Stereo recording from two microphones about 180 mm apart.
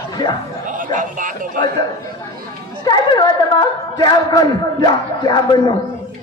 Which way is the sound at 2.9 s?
25° left (ahead or behind).